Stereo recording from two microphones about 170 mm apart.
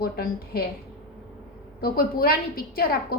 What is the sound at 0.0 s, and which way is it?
Speech, 60° left (ahead or behind).